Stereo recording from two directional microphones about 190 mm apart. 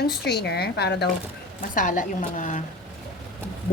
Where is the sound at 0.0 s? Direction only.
60° left (ahead or behind).